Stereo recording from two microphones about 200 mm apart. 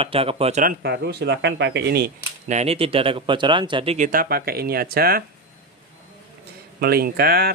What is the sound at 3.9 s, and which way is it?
Speech, 40° right (ahead or behind).